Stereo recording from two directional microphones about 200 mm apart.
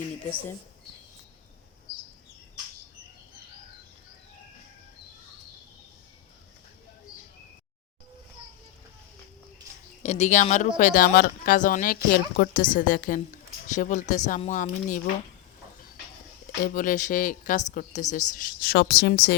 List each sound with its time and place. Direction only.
1.9 s a sound: 25° left (ahead or behind)
10.0 s speech: 35° left (ahead or behind)
16.6 s speech: 40° left (ahead or behind)